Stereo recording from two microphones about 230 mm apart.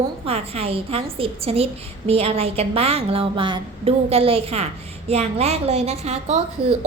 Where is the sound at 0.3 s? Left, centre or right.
Right.